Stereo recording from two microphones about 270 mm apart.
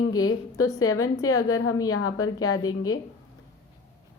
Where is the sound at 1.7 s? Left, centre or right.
Centre.